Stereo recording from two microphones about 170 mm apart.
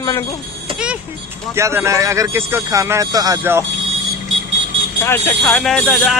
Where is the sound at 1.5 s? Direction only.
15° right (ahead or behind).